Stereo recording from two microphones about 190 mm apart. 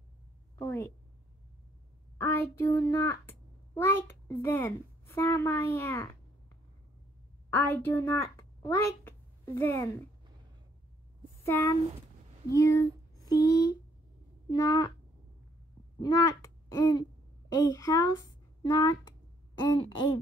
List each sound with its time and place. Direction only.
0.6 s a woman's voice: 15° left (ahead or behind)
2.1 s a child's voice: 10° left (ahead or behind)
7.5 s a child's voice: 10° left (ahead or behind)
11.4 s speech: 15° left (ahead or behind)
12.4 s a sound: 15° left (ahead or behind)
14.5 s speech: 20° left (ahead or behind)
16.0 s speech: 15° left (ahead or behind)